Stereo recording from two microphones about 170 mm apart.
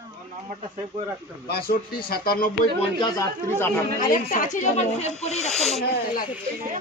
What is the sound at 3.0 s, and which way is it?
Speech, 20° left (ahead or behind).